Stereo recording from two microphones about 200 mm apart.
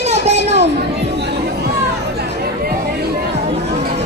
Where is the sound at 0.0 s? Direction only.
35° right (ahead or behind).